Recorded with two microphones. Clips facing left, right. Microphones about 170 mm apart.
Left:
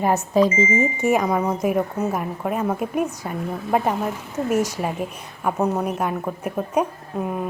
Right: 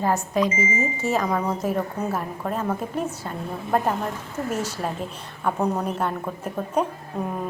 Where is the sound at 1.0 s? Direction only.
15° left (ahead or behind).